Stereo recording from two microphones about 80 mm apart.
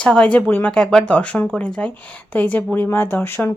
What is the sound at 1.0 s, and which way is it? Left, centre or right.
Speech, centre.